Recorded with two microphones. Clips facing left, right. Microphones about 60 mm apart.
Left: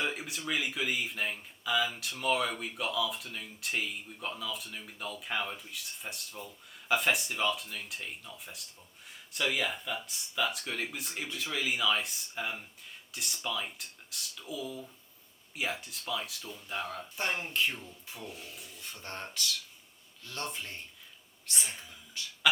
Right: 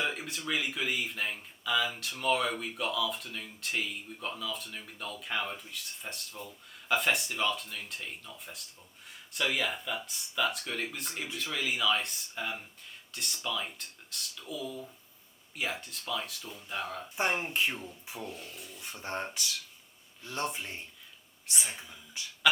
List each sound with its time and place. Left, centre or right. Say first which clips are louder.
0.0 s speech: right 1 dB; centre
17.2 s speech: right 2 dB; right
18.2 s speech: right 3 dB; centre
18.8 s speech: right 6 dB; centre